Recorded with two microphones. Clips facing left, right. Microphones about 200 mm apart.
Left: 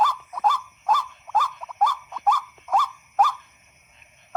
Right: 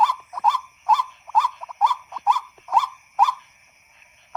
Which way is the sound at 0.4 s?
40° left (ahead or behind).